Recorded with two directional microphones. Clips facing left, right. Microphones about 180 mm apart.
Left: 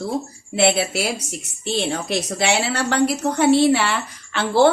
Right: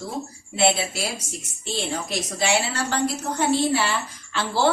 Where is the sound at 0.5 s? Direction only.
65° left (ahead or behind).